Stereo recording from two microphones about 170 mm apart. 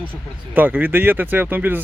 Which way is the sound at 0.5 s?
10° right (ahead or behind).